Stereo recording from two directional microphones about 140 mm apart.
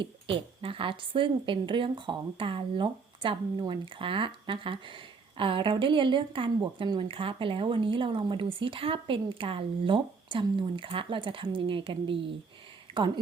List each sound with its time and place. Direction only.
0.0 s speech: 40° right (ahead or behind)